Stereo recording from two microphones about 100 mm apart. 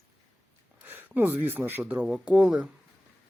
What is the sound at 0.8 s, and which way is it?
Speech, 20° right (ahead or behind).